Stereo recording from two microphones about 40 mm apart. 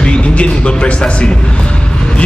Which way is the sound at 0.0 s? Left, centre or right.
Left.